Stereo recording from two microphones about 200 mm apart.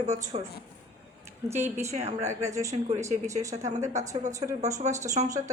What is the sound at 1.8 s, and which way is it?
Speech, 35° right (ahead or behind).